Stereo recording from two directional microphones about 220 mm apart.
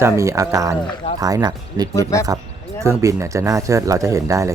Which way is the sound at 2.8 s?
15° right (ahead or behind).